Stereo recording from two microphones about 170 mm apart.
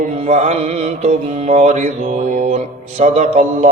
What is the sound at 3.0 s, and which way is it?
Mantra, 40° right (ahead or behind).